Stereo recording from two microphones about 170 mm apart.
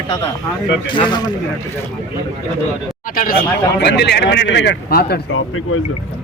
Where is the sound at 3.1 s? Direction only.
55° left (ahead or behind).